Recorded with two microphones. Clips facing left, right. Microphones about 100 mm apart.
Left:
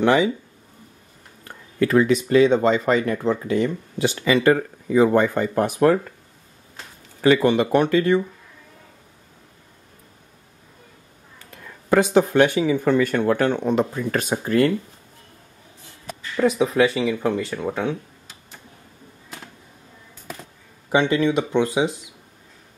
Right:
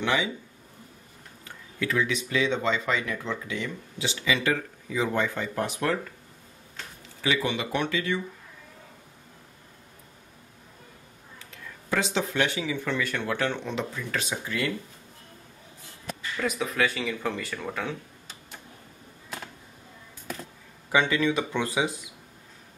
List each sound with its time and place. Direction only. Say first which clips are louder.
0.0 s speech: left 9 dB; 45° left (ahead or behind)
1.4 s speech: left 10 dB; 50° left (ahead or behind)
7.2 s speech: left 11 dB; 50° left (ahead or behind)
11.3 s speech: left 3 dB; 50° left (ahead or behind)
16.3 s speech: left 10 dB; 30° left (ahead or behind)
20.9 s speech: left 5 dB; 20° left (ahead or behind)